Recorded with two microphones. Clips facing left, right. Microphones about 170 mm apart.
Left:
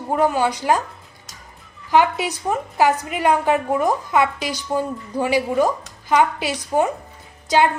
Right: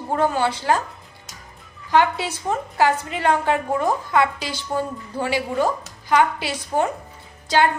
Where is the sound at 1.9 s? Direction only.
15° left (ahead or behind).